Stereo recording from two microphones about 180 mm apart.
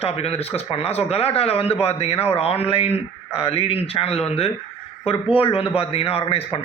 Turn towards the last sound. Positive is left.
turn(degrees=30)  # may be behind; listen again after turning